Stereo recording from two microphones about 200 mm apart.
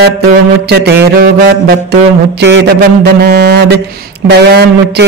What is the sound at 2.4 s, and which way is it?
A man's voice, 60° right (ahead or behind).